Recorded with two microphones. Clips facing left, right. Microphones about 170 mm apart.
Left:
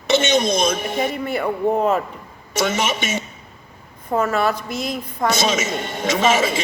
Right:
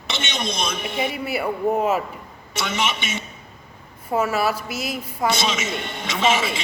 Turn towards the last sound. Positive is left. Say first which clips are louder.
# left 4 dB
turn(degrees=45)  # may be behind; listen again after turning